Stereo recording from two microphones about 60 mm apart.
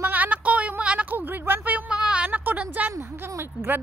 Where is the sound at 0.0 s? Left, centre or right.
Right.